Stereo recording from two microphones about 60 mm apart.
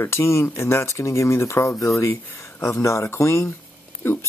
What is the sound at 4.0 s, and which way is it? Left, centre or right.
Speech, left.